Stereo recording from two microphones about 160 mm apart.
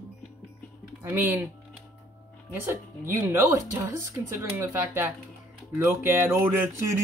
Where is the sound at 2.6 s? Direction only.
15° right (ahead or behind).